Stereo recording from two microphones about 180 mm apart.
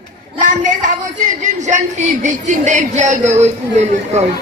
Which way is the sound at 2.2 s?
45° right (ahead or behind).